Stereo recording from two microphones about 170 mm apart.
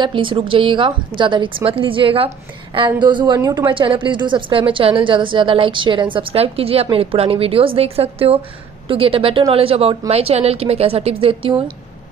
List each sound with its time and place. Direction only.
0.0 s a woman's voice: 30° right (ahead or behind)